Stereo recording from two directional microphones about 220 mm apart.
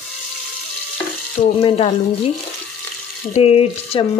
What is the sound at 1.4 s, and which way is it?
Speech, 25° left (ahead or behind).